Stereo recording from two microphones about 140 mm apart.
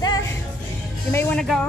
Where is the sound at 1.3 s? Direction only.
5° left (ahead or behind).